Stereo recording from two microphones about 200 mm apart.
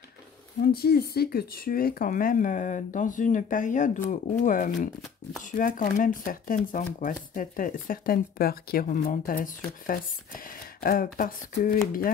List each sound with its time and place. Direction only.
0.7 s speech: 50° left (ahead or behind)